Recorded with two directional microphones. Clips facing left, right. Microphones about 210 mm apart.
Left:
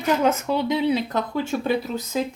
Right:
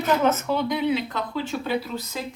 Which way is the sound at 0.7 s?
35° left (ahead or behind).